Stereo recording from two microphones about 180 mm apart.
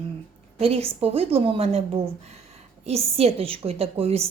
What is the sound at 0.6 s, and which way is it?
A woman's voice, 30° right (ahead or behind).